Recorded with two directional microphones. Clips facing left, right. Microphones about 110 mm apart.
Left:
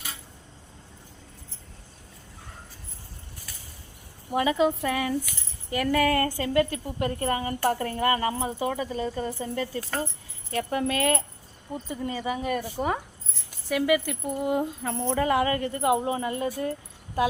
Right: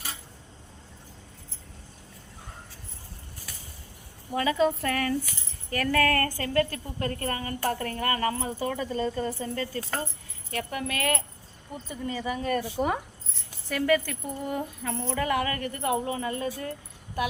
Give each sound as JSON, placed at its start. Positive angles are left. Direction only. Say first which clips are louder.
{"t": 4.4, "sound": "a woman's voice", "louder": "left 1 dB", "side_deg": 15}
{"t": 10.5, "sound": "a woman's voice", "louder": "left 5 dB", "side_deg": 30}